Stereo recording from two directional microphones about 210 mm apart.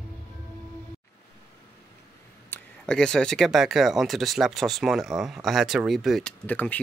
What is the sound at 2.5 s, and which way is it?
Speech, 5° left (ahead or behind).